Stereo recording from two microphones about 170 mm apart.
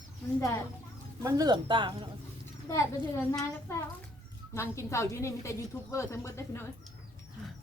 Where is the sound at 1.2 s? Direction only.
20° right (ahead or behind).